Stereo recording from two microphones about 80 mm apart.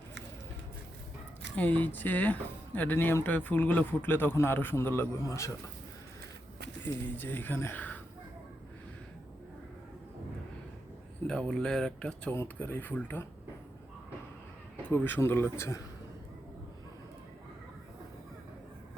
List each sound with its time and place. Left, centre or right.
1.5 s a man's voice: left
5.2 s speech: left
6.8 s a man's voice: left
11.3 s speech: centre
12.3 s a man's voice: left
14.8 s speech: left
15.5 s a man's voice: left